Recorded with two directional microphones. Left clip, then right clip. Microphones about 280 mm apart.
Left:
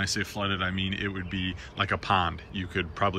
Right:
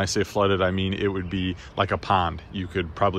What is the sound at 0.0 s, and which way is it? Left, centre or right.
Speech, centre.